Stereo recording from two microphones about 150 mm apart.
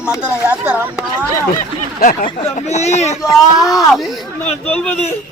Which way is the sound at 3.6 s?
25° left (ahead or behind).